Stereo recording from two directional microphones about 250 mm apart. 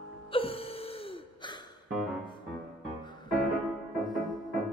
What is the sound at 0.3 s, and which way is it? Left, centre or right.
Music, left.